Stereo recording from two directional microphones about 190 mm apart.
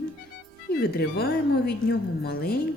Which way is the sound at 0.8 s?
55° left (ahead or behind).